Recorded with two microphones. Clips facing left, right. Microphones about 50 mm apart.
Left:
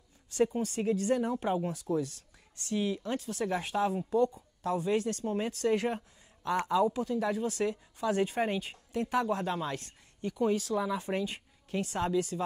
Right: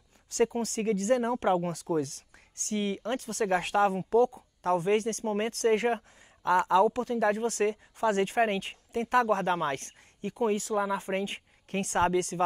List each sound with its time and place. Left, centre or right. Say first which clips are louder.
0.3 s speech: right 2 dB; right
2.0 s speech: right 3 dB; right
6.6 s speech: right 2 dB; right